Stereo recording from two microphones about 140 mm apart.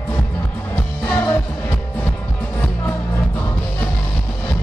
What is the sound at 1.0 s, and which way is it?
Music, 15° left (ahead or behind).